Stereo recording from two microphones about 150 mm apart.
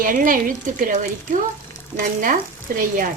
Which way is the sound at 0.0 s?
65° right (ahead or behind).